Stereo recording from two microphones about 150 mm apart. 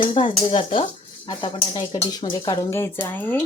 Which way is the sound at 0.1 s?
35° left (ahead or behind).